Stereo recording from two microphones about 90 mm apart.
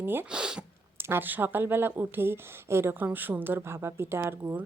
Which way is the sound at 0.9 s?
25° right (ahead or behind).